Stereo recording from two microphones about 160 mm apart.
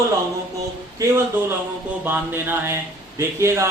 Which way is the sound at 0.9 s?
15° right (ahead or behind).